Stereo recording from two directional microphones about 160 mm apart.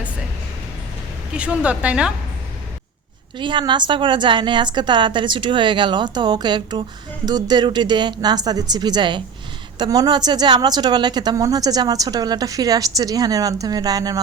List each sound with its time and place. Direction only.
1.3 s speech: 5° right (ahead or behind)
3.3 s a woman's voice: 30° right (ahead or behind)